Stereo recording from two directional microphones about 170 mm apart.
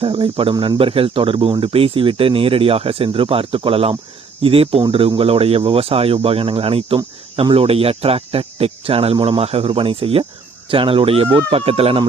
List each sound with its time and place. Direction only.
0.0 s speech: 30° right (ahead or behind)